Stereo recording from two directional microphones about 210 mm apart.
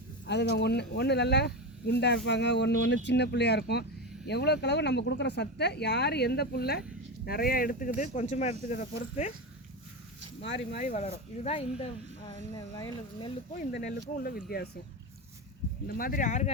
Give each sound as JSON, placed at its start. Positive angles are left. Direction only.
{"t": 0.3, "sound": "speech", "side_deg": 55}
{"t": 10.4, "sound": "speech", "side_deg": 55}
{"t": 10.8, "sound": "speech", "side_deg": 30}
{"t": 13.8, "sound": "speech", "side_deg": 40}
{"t": 15.9, "sound": "speech", "side_deg": 45}